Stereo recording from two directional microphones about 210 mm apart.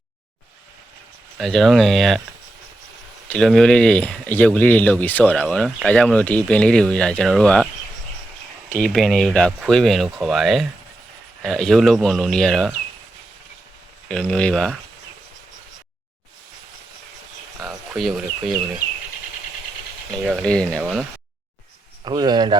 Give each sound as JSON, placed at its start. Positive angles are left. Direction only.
{"t": 1.4, "sound": "speech", "side_deg": 0}
{"t": 3.2, "sound": "speech", "side_deg": 5}
{"t": 8.7, "sound": "speech", "side_deg": 0}
{"t": 14.1, "sound": "speech", "side_deg": 5}
{"t": 17.6, "sound": "a sound", "side_deg": 0}
{"t": 20.2, "sound": "speech", "side_deg": 0}
{"t": 22.0, "sound": "speech", "side_deg": -20}